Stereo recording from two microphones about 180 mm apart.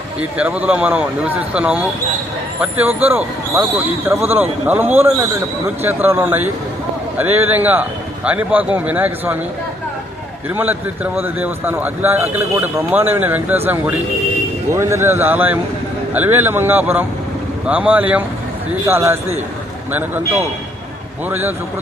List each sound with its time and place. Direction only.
0.2 s speech: 5° right (ahead or behind)
10.5 s speech: 10° right (ahead or behind)
14.7 s speech: 15° right (ahead or behind)